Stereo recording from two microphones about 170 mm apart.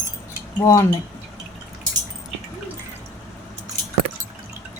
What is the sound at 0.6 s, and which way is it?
Speech, 20° left (ahead or behind).